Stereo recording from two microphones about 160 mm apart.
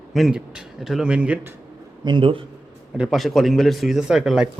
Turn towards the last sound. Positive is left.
turn(degrees=-5)  # may be behind; listen again after turning